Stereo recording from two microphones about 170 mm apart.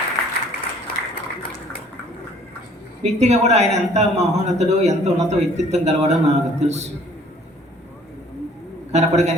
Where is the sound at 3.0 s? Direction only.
40° right (ahead or behind).